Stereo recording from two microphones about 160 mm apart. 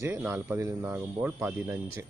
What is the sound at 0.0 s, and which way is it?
Speech, 15° right (ahead or behind).